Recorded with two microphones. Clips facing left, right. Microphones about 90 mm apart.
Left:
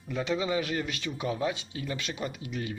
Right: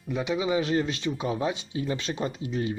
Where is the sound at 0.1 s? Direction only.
15° right (ahead or behind).